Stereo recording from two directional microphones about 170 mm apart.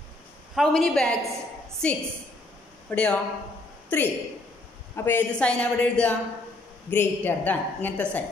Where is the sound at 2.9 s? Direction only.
10° left (ahead or behind).